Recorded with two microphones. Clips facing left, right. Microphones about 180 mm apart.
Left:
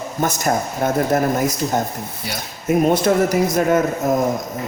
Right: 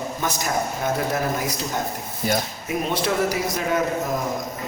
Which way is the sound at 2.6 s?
45° left (ahead or behind).